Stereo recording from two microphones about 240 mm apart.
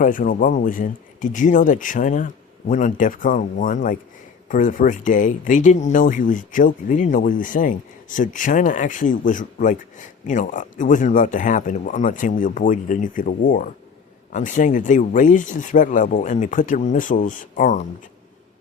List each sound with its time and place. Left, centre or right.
0.0 s speech: left